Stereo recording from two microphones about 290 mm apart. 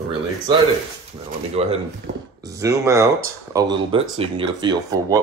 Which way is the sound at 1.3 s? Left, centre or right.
Right.